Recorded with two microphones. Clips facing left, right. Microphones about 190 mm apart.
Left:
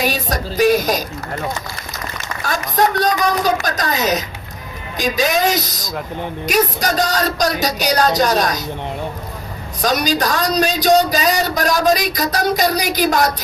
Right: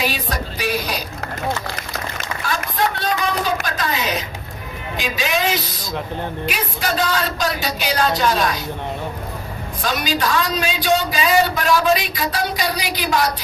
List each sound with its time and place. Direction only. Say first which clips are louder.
0.0 s a sound: left 3 dB; 45° left (ahead or behind)
2.4 s speech: left 5 dB; 45° left (ahead or behind)
9.8 s speech: left 4 dB; 40° left (ahead or behind)